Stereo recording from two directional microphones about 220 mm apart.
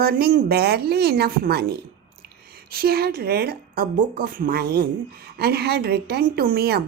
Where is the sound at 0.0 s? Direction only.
45° right (ahead or behind).